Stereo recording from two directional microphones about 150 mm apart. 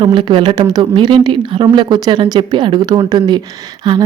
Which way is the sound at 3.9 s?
30° right (ahead or behind).